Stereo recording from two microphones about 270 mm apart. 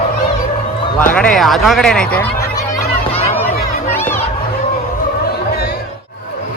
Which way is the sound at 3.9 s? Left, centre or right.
Centre.